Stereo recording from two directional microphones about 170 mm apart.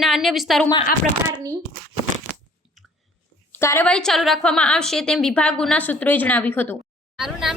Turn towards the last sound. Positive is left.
turn(degrees=0)  # may be behind; listen again after turning